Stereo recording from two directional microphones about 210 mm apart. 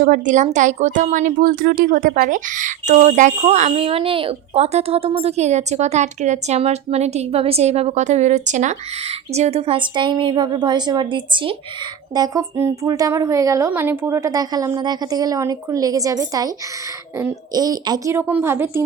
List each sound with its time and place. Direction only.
0.0 s a woman's voice: 40° right (ahead or behind); by 18.8 s 10° right (ahead or behind)